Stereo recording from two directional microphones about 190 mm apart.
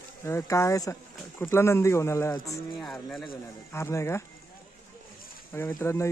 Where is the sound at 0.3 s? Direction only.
15° left (ahead or behind).